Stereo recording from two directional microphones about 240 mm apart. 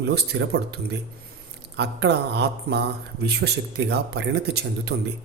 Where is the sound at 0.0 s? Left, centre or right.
Right.